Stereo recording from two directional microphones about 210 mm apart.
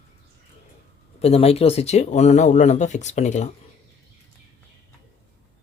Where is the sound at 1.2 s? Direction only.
30° left (ahead or behind).